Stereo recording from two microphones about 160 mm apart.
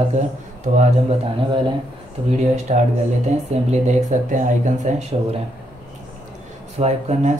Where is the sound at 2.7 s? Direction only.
45° right (ahead or behind).